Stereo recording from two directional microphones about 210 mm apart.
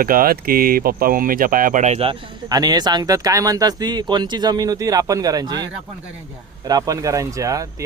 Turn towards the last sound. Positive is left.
turn(degrees=-15)  # may be behind; listen again after turning